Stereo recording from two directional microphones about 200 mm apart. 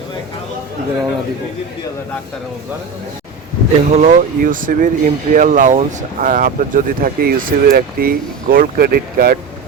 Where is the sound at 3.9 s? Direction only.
35° right (ahead or behind).